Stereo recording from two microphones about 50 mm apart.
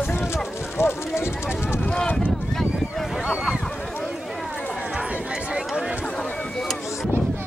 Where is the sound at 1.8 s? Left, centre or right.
Centre.